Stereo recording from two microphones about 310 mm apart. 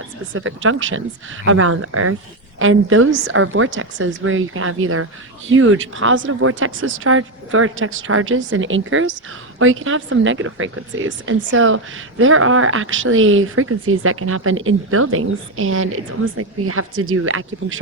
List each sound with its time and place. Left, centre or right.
0.3 s speech: right